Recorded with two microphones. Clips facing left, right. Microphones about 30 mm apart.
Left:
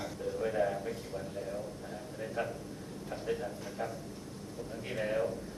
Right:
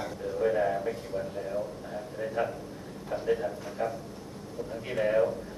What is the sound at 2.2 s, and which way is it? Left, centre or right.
A man's voice, centre.